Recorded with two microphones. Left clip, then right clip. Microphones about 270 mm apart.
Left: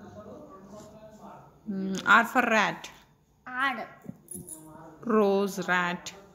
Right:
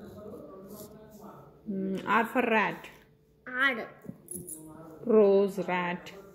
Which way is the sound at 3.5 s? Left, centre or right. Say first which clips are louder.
Right 1 dB; left.